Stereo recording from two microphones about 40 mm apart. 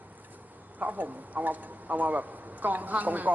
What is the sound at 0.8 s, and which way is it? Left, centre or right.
Speech, right.